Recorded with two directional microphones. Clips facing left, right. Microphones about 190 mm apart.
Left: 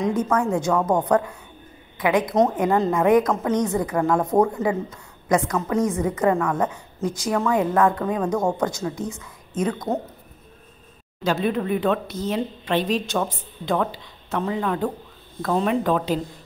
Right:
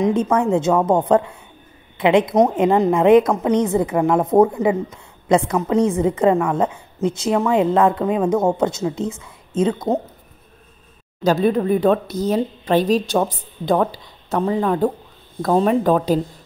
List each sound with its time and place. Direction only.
0.0 s a woman's voice: 25° right (ahead or behind)
11.2 s a woman's voice: 35° right (ahead or behind)